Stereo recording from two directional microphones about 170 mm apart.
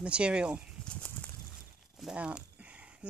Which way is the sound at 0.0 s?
5° right (ahead or behind).